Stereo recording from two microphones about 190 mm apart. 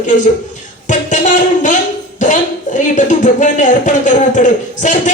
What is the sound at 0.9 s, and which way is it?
Music, 40° left (ahead or behind).